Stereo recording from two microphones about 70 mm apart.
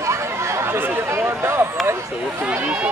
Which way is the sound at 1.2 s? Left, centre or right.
Right.